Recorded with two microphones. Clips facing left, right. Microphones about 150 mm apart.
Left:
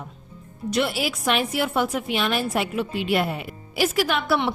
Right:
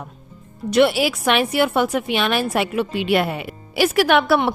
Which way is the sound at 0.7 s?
75° right (ahead or behind).